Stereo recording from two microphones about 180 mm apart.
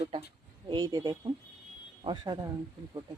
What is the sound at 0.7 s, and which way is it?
Speech, 25° right (ahead or behind).